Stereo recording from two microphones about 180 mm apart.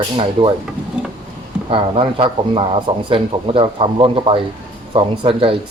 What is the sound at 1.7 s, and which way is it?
Speech, 30° right (ahead or behind).